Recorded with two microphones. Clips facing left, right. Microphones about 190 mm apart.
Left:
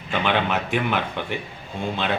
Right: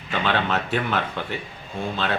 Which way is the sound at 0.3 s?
15° left (ahead or behind).